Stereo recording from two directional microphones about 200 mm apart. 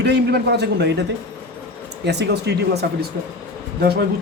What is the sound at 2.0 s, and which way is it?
A man's voice, 55° right (ahead or behind).